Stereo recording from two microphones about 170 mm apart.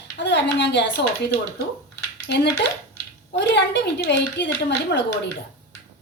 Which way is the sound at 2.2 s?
75° left (ahead or behind).